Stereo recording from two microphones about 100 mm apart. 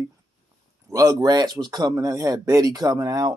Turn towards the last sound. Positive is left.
turn(degrees=-40)  # may be behind; listen again after turning